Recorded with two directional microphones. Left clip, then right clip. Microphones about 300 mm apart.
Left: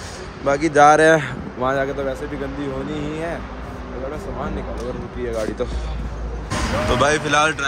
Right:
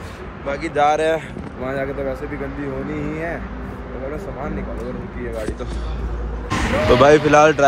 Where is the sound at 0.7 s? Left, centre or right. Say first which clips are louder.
Left 5 dB; left.